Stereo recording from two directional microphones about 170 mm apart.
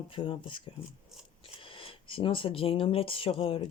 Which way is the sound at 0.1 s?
30° left (ahead or behind).